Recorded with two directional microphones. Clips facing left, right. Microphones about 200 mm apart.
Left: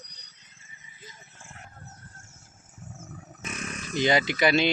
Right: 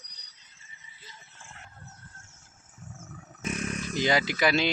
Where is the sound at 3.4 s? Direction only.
55° right (ahead or behind).